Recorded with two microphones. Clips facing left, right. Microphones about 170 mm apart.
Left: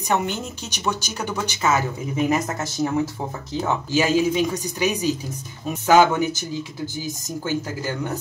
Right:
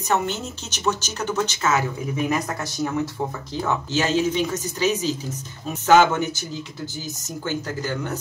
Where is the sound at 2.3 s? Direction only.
25° left (ahead or behind).